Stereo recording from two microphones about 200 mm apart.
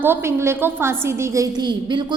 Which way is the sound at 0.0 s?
10° right (ahead or behind).